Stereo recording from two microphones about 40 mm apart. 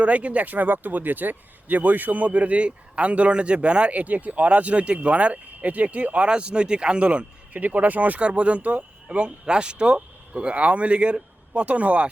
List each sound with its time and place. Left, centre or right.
0.0 s a man's voice: right
3.9 s a man's voice: right
6.2 s speech: right
7.6 s speech: right
8.2 s a man's voice: right
9.0 s a man's voice: right